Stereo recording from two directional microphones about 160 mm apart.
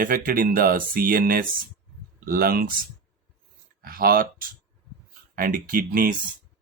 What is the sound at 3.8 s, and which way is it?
Speech, 70° right (ahead or behind).